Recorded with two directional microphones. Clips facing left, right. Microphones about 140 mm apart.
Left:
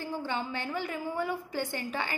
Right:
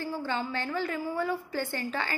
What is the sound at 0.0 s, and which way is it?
A woman's voice, 15° left (ahead or behind).